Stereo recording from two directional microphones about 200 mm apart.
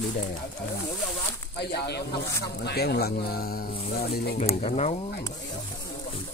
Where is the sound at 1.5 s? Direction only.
55° left (ahead or behind).